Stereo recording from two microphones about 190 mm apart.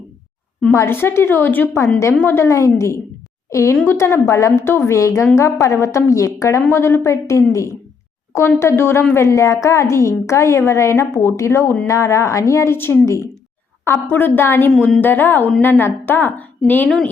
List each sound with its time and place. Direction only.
0.6 s a woman's voice: 15° left (ahead or behind)
14.7 s a woman's voice: centre (ahead or behind)